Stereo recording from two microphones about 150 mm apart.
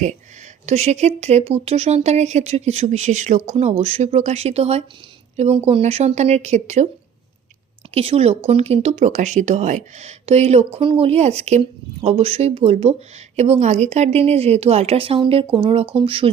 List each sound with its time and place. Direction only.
0.6 s speech: 50° right (ahead or behind)
7.9 s speech: 45° right (ahead or behind)